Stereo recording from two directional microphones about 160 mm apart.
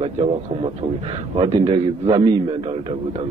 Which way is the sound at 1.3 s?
35° right (ahead or behind).